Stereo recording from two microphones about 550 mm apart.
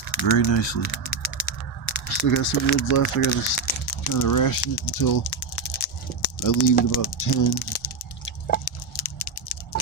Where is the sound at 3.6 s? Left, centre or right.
Left.